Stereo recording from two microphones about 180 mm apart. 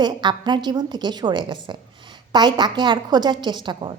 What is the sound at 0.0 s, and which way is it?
A woman's voice, 25° right (ahead or behind).